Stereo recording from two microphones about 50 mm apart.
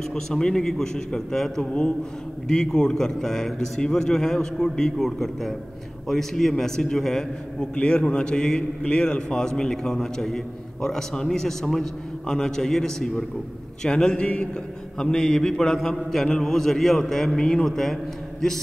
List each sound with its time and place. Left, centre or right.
0.1 s a man's voice: centre
1.7 s a man's voice: centre
7.7 s a man's voice: centre
15.0 s a man's voice: centre